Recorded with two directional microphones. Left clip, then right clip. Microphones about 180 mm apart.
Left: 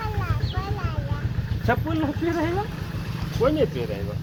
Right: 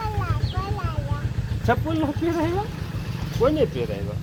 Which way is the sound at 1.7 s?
20° right (ahead or behind).